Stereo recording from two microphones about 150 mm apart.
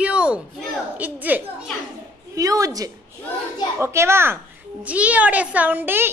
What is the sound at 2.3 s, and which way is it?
A woman's voice, 25° right (ahead or behind).